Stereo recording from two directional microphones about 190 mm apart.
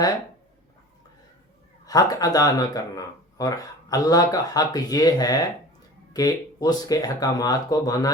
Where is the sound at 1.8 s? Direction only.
20° left (ahead or behind).